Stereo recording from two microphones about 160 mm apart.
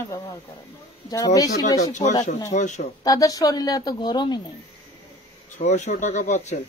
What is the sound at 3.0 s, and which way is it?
Speech, 20° left (ahead or behind).